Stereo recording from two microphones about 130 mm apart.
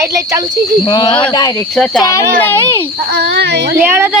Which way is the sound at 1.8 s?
5° left (ahead or behind).